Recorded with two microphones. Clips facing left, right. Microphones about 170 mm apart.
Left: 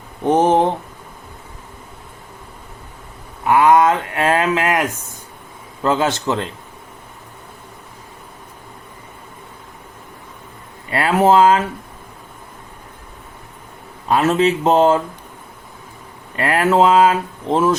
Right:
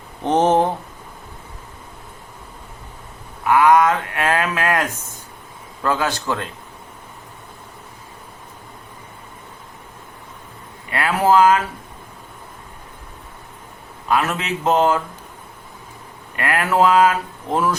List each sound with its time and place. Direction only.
0.3 s a sound: 10° left (ahead or behind)
3.4 s speech: 25° left (ahead or behind)
10.9 s speech: 30° left (ahead or behind)
14.1 s speech: 30° left (ahead or behind)
16.3 s speech: 30° left (ahead or behind)